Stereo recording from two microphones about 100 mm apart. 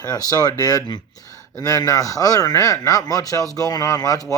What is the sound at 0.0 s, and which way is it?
Speech, 40° left (ahead or behind).